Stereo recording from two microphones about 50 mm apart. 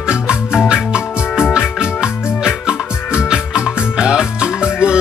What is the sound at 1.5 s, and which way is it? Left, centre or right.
Music, centre.